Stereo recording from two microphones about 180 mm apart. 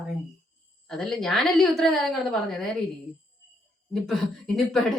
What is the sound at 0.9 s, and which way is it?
A woman's voice, 5° left (ahead or behind).